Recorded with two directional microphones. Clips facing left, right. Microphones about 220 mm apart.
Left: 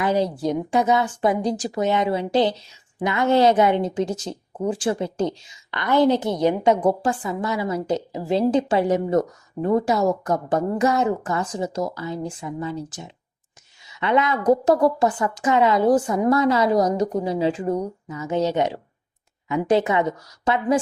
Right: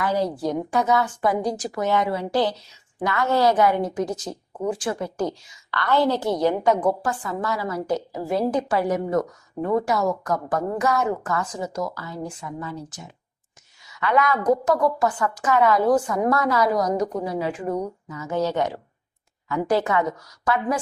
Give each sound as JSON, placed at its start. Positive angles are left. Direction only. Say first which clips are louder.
{"t": 0.0, "sound": "a woman's voice", "louder": "left 2 dB", "side_deg": 20}